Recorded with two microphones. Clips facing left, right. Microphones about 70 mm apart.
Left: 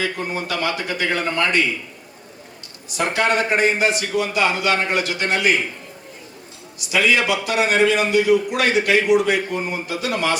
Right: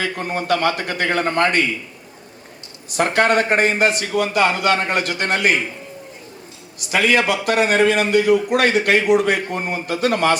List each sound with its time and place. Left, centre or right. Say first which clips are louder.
0.0 s a man's voice: right 1 dB; right
2.9 s a man's voice: right 3 dB; right
6.7 s a man's voice: right 1 dB; right